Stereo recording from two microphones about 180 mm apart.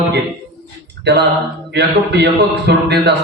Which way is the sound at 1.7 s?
65° right (ahead or behind).